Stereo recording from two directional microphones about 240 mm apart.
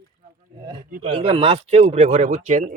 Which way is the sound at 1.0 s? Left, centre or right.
Right.